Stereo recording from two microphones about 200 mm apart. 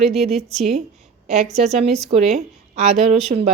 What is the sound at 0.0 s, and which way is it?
Speech, centre (ahead or behind).